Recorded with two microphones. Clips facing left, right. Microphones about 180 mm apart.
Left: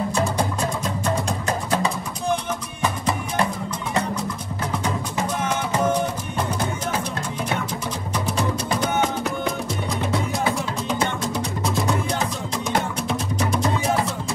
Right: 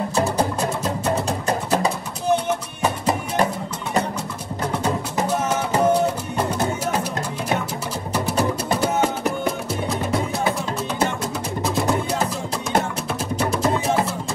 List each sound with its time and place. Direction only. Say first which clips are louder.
2.8 s music: even; 35° right (ahead or behind)
8.1 s music: right 3 dB; 5° right (ahead or behind)
11.6 s music: right 3 dB; centre (ahead or behind)
13.4 s music: right 2 dB; 5° right (ahead or behind)